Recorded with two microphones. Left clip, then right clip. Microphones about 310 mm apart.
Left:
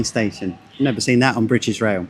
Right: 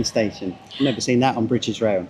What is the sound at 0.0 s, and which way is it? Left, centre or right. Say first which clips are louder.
Speech: even; left.